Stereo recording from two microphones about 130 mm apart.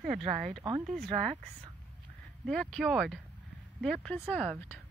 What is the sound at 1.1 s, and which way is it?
Speech, 45° right (ahead or behind).